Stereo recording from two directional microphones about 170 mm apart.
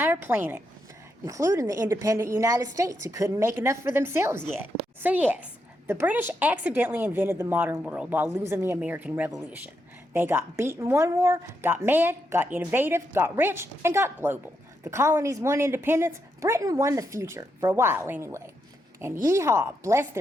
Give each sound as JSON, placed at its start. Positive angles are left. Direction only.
{"t": 0.0, "sound": "a woman's voice", "side_deg": -10}